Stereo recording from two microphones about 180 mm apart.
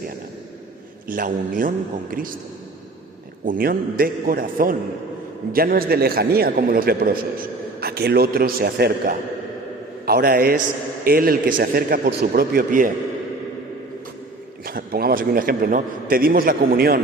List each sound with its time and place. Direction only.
1.0 s a man's voice: 50° right (ahead or behind)
3.4 s a man's voice: 50° right (ahead or behind)
14.6 s a man's voice: 55° right (ahead or behind)